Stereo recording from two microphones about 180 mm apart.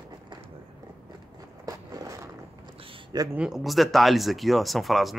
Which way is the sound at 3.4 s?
5° right (ahead or behind).